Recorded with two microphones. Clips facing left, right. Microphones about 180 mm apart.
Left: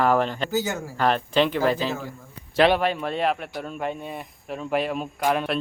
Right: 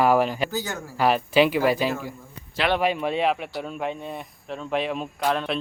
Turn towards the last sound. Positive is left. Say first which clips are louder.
# left 1 dB
turn(degrees=10)  # may be behind; listen again after turning